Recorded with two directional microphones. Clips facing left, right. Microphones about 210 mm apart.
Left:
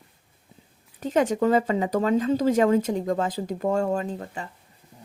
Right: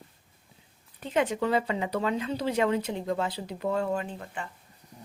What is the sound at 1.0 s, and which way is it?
Speech, 45° left (ahead or behind).